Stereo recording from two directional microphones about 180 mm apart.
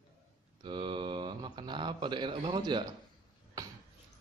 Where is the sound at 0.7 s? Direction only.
25° right (ahead or behind).